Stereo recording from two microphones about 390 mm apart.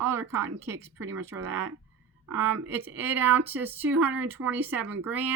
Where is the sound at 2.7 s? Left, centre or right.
Centre.